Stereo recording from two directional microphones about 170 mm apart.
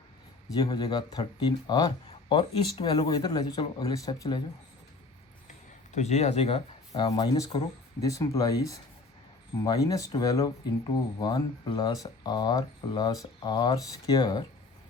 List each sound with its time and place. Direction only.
0.5 s speech: 25° left (ahead or behind)
5.9 s speech: 40° left (ahead or behind); by 14.4 s 25° left (ahead or behind)